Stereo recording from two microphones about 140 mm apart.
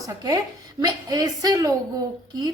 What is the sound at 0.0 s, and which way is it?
A woman's voice, 25° right (ahead or behind).